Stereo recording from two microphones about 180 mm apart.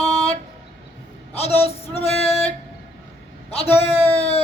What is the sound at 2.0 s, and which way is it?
Music, 35° left (ahead or behind).